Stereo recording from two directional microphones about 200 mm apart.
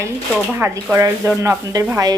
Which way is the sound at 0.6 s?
10° right (ahead or behind).